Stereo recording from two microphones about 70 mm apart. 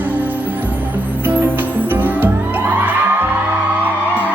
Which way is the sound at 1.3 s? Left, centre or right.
Right.